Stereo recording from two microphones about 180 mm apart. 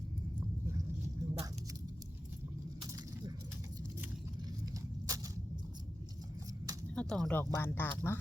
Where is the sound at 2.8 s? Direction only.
20° right (ahead or behind).